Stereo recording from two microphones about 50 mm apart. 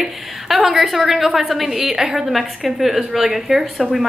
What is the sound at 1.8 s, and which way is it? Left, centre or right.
Speech, centre.